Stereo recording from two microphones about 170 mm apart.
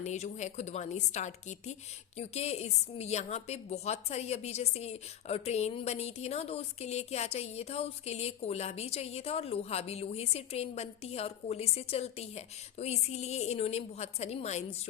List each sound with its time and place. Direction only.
0.0 s a woman's voice: 45° left (ahead or behind)